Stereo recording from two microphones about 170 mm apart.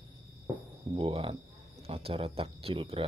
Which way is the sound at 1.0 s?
30° right (ahead or behind).